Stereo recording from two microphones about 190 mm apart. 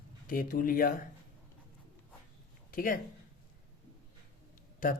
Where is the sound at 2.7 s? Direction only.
45° left (ahead or behind).